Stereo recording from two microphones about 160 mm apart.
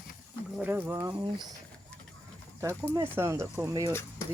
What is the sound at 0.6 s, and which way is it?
Speech, 10° right (ahead or behind).